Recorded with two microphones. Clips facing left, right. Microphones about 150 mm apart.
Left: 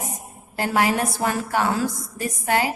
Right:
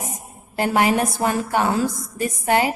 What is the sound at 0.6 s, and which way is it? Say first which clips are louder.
A woman's voice: right 3 dB; 20° right (ahead or behind).